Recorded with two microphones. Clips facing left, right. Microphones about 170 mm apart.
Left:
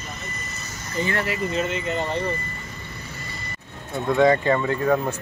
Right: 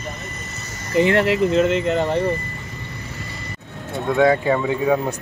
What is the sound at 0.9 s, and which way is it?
Speech, 70° right (ahead or behind).